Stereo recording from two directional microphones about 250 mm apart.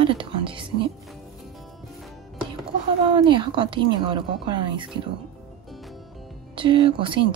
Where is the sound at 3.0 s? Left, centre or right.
Centre.